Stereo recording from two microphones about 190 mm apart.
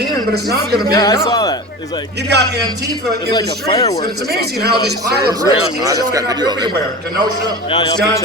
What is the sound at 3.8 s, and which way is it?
Speech, 20° left (ahead or behind).